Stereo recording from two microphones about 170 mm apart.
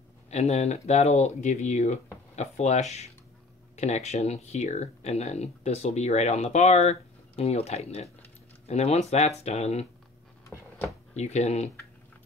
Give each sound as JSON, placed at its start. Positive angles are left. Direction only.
{"t": 0.3, "sound": "speech", "side_deg": 40}
{"t": 11.1, "sound": "speech", "side_deg": 40}